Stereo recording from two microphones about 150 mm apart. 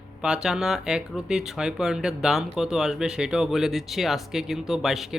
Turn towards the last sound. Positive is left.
turn(degrees=0)  # may be behind; listen again after turning